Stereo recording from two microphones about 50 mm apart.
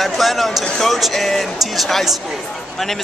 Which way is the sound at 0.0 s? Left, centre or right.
Centre.